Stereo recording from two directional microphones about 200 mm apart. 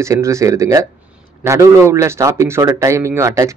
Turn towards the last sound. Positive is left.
turn(degrees=-15)  # may be behind; listen again after turning